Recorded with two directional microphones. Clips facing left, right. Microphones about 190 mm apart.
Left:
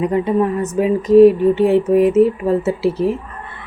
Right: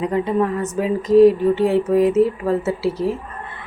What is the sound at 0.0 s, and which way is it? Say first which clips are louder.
A woman's voice: left 3 dB; 20° left (ahead or behind).